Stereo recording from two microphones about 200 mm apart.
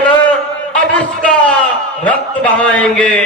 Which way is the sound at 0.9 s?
5° left (ahead or behind).